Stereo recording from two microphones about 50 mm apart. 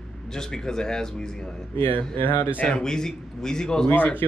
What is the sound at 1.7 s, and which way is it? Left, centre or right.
Speech, left.